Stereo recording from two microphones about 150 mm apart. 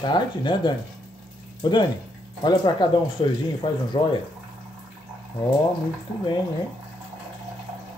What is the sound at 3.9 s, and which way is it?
Speech, 40° left (ahead or behind).